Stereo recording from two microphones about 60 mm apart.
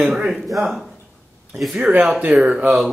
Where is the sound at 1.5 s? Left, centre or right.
Centre.